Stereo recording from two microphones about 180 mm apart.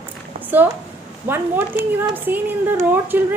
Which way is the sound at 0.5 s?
10° right (ahead or behind).